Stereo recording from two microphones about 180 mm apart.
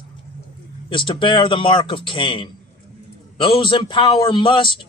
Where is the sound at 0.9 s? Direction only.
30° left (ahead or behind).